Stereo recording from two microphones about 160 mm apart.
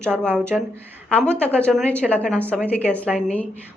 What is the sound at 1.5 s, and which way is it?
A woman's voice, 5° left (ahead or behind).